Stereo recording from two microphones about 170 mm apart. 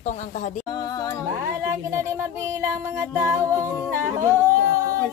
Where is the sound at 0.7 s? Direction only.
20° left (ahead or behind).